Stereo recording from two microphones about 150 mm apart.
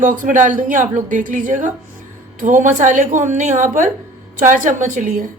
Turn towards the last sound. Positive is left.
turn(degrees=-60)  # may be behind; listen again after turning